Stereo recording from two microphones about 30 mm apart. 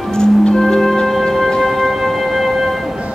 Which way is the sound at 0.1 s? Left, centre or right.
Left.